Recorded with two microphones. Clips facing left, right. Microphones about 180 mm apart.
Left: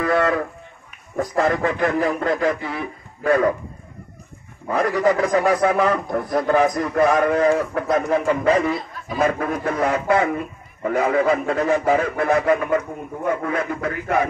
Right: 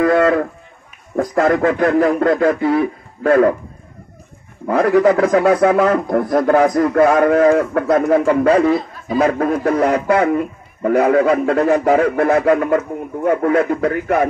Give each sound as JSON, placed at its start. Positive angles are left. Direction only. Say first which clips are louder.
{"t": 0.0, "sound": "a sound", "louder": "right 6 dB", "side_deg": -50}
{"t": 1.1, "sound": "speech", "louder": "right 5 dB", "side_deg": -55}
{"t": 4.6, "sound": "a man's voice", "louder": "right 6 dB", "side_deg": -55}